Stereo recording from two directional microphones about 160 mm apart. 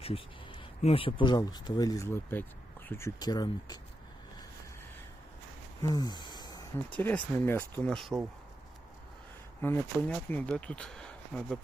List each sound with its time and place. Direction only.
0.8 s speech: 40° left (ahead or behind)
5.8 s snort: 25° left (ahead or behind)
6.9 s speech: 10° left (ahead or behind)
9.6 s speech: 15° left (ahead or behind)